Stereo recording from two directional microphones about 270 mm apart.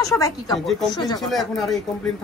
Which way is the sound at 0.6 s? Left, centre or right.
Centre.